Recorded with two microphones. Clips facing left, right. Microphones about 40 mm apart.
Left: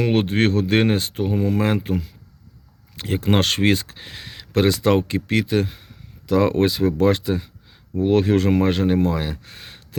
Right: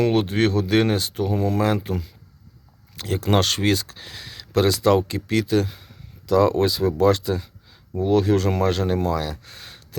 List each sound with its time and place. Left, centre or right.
0.0 s speech: left